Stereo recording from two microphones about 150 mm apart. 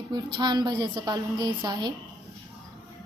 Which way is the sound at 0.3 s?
30° right (ahead or behind).